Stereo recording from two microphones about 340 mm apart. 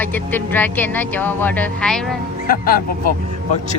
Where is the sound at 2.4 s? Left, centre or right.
Left.